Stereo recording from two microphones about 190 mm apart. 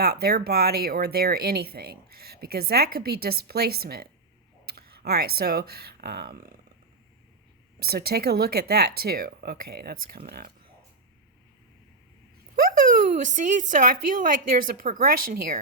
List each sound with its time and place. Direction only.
0.0 s speech: 55° right (ahead or behind)
7.8 s speech: 55° right (ahead or behind)
12.5 s speech: 45° right (ahead or behind)